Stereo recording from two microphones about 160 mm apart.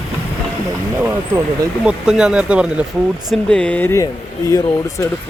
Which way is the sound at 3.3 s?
5° left (ahead or behind).